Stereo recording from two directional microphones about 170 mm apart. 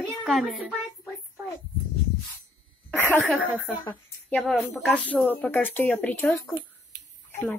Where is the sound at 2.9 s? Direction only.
15° left (ahead or behind).